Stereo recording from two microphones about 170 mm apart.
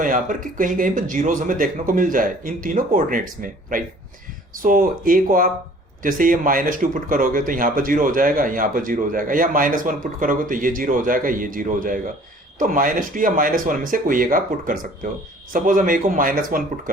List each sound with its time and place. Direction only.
0.0 s speech: 55° right (ahead or behind)
4.6 s speech: 55° right (ahead or behind)